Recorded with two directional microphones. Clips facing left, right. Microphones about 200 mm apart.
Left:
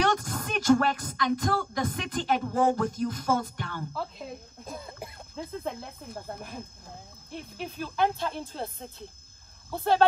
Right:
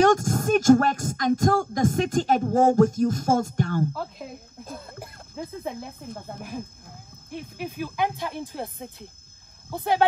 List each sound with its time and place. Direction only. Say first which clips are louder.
0.0 s music: right 8 dB; 45° right (ahead or behind)
4.6 s cough: even; centre (ahead or behind)
7.2 s snake: right 4 dB; 10° right (ahead or behind)
9.7 s cricket: right 1 dB; 15° right (ahead or behind)